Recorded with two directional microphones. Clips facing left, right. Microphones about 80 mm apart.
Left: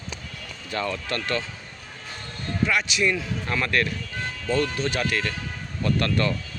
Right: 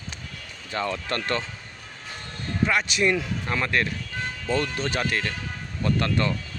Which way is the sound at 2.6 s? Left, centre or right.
Right.